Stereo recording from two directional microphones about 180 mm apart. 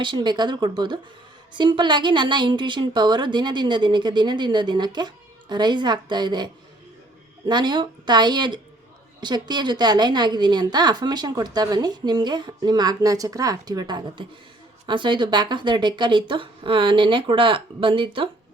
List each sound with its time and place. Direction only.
0.0 s a woman's voice: 25° right (ahead or behind)